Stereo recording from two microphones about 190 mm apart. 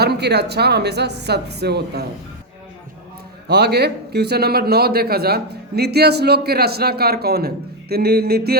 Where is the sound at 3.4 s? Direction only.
60° right (ahead or behind).